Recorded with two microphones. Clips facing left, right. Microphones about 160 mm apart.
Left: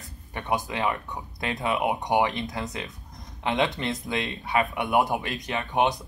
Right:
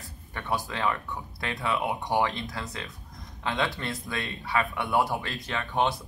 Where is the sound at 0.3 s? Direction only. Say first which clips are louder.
Left 3 dB; 20° left (ahead or behind).